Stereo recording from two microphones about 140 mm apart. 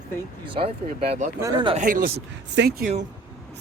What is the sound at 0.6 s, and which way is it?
Speech, 45° right (ahead or behind).